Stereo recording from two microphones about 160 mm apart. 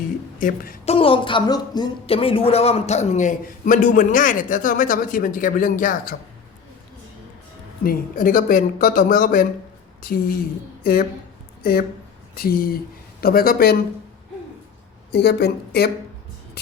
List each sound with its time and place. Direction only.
0.3 s a woman's voice: 60° left (ahead or behind)
0.9 s speech: 35° left (ahead or behind)
2.0 s a man's voice: 35° left (ahead or behind); by 6.1 s 55° left (ahead or behind)
7.9 s a man's voice: 55° left (ahead or behind)
10.0 s speech: 70° left (ahead or behind)
11.6 s speech: 70° left (ahead or behind)
15.1 s speech: 90° left